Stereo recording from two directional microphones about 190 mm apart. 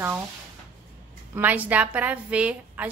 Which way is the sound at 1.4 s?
10° right (ahead or behind).